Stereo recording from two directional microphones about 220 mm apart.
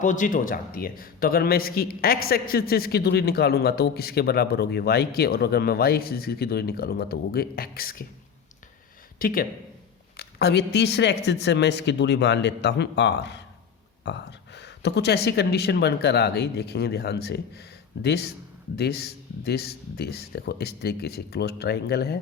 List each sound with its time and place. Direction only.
0.0 s a man's voice: 35° left (ahead or behind)
9.1 s a man's voice: 40° left (ahead or behind)